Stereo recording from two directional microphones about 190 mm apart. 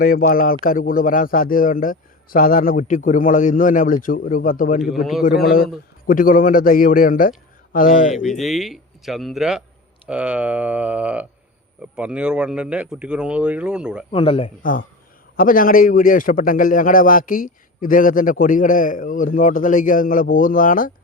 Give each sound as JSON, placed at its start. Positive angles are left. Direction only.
{"t": 0.0, "sound": "a man's voice", "side_deg": 50}
{"t": 4.9, "sound": "a man's voice", "side_deg": 0}
{"t": 5.2, "sound": "a man's voice", "side_deg": 50}
{"t": 8.1, "sound": "a man's voice", "side_deg": 0}
{"t": 14.1, "sound": "speech", "side_deg": 30}
{"t": 14.6, "sound": "a man's voice", "side_deg": 45}